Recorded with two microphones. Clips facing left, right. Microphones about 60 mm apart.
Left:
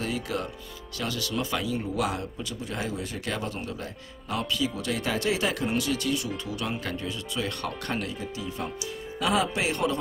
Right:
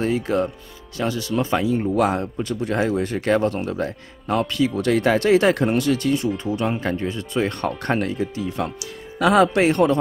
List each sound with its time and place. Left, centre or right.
0.0 s speech: right
9.2 s speech: right